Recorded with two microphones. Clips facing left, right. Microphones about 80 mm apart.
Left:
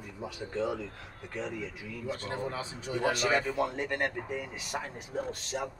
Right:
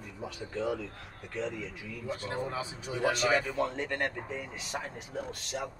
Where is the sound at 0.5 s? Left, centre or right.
Left.